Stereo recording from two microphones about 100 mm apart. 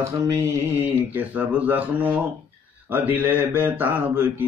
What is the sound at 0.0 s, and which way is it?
Mantra, 30° right (ahead or behind).